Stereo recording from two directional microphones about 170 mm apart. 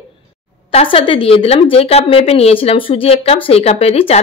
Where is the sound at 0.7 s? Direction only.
35° left (ahead or behind).